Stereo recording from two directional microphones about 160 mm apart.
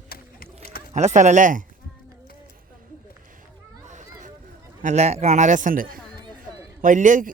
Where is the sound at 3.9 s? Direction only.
50° right (ahead or behind).